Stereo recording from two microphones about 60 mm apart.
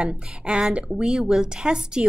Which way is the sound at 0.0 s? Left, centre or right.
Centre.